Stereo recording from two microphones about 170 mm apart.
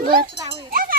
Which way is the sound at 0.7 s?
55° right (ahead or behind).